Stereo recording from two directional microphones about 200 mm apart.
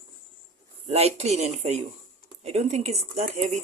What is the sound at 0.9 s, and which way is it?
Speech, 30° right (ahead or behind).